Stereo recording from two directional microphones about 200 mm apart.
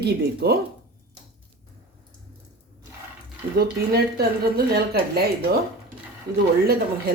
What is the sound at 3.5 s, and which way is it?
A woman's voice, 50° right (ahead or behind).